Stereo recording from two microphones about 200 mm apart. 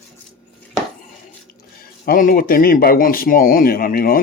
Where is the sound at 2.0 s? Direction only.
45° left (ahead or behind).